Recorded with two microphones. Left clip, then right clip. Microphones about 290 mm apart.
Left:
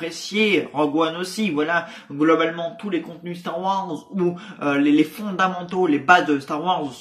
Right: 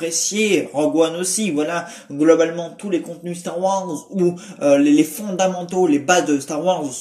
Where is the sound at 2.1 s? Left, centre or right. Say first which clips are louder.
Right 4 dB; centre.